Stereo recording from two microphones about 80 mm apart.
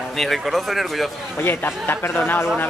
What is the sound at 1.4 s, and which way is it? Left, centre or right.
Speech, left.